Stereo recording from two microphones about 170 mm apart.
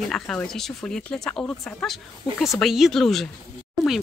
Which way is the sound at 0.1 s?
5° left (ahead or behind).